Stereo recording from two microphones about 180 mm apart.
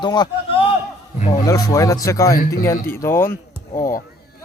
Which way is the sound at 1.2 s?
40° left (ahead or behind).